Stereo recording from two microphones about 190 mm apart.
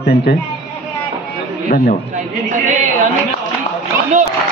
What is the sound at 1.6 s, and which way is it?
Speech, 40° left (ahead or behind).